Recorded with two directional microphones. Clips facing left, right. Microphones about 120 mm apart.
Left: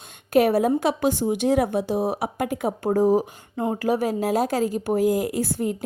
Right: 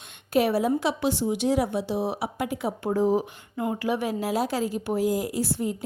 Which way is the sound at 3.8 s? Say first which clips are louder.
Left 6 dB; 40° left (ahead or behind).